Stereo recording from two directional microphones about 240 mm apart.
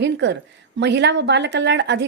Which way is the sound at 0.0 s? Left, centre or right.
Right.